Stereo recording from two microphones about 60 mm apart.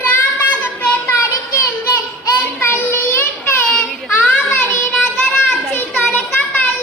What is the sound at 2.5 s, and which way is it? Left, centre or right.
Child singing, left.